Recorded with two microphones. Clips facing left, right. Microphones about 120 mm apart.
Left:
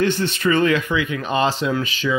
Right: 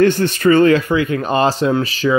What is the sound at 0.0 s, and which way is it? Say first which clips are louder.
Speech: right 7 dB; 45° right (ahead or behind).